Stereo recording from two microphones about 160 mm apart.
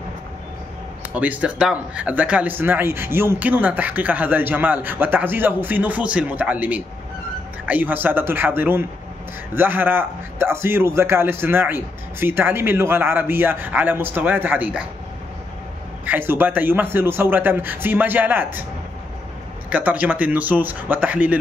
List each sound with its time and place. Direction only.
1.1 s speech: 10° right (ahead or behind)
16.1 s speech: 15° right (ahead or behind)
19.7 s speech: 10° right (ahead or behind)